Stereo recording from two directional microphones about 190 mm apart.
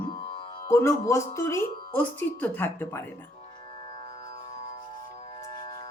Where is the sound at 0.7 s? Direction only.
15° left (ahead or behind).